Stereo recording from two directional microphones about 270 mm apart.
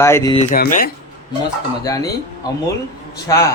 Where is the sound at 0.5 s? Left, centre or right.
Left.